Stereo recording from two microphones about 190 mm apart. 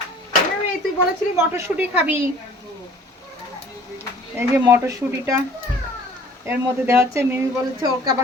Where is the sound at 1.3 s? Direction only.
10° right (ahead or behind).